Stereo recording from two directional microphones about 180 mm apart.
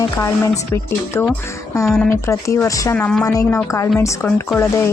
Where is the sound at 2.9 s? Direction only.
5° left (ahead or behind).